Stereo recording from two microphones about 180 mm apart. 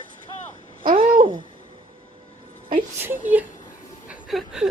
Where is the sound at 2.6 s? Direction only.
50° right (ahead or behind).